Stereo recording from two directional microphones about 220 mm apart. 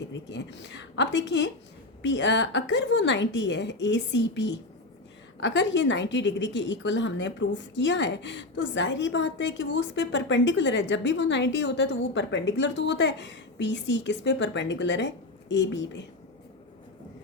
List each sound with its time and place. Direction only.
0.0 s a woman's voice: 55° left (ahead or behind)